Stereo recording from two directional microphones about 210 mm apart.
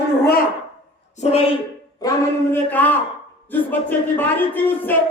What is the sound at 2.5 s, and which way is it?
Speech, 10° left (ahead or behind).